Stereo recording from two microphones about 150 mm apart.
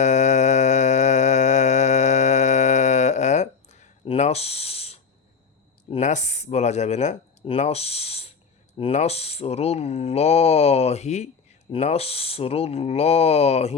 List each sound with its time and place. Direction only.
0.0 s mantra: 50° left (ahead or behind)
5.9 s speech: 50° left (ahead or behind)